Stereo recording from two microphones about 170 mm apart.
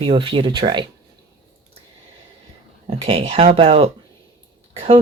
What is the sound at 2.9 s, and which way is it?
Speech, 35° right (ahead or behind).